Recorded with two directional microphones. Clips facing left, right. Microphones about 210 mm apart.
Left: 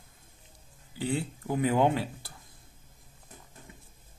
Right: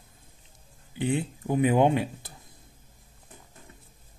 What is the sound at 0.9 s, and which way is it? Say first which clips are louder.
Speech: right 4 dB; 20° right (ahead or behind).